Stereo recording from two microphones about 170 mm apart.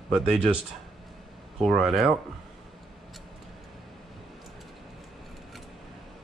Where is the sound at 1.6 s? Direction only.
Centre (ahead or behind).